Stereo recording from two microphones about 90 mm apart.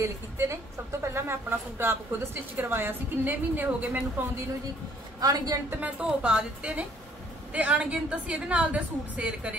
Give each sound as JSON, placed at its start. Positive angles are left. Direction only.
{"t": 0.0, "sound": "a woman's voice", "side_deg": -35}
{"t": 5.2, "sound": "a man's voice", "side_deg": -45}
{"t": 5.8, "sound": "a woman's voice", "side_deg": -10}